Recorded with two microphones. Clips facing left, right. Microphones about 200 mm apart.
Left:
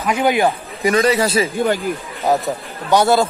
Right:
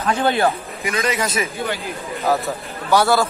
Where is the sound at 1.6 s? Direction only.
50° left (ahead or behind).